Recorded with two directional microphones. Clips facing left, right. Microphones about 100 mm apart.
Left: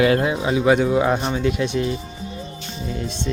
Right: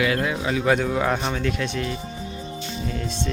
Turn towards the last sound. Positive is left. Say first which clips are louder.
# even
turn(degrees=10)  # may be behind; listen again after turning